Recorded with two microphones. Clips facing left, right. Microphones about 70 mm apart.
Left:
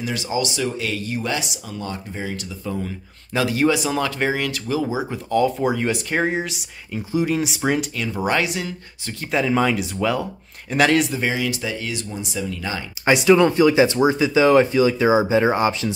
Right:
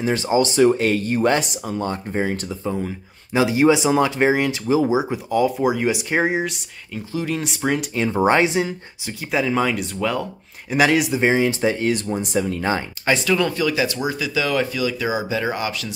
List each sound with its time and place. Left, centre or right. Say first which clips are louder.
0.0 s speech: right 5 dB; right
3.3 s speech: right 3 dB; centre
5.3 s speech: even; centre
7.2 s speech: left 1 dB; centre
7.9 s speech: right 5 dB; right
9.3 s speech: left 1 dB; centre
11.1 s speech: right 5 dB; right
13.0 s speech: left 6 dB; left